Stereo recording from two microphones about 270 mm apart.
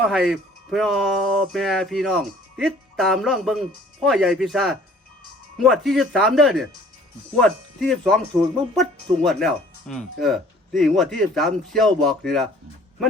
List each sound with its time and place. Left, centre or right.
0.0 s speech: centre